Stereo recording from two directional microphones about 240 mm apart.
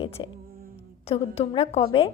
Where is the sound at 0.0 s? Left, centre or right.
Left.